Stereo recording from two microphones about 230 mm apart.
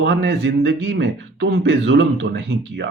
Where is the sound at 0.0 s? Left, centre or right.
Right.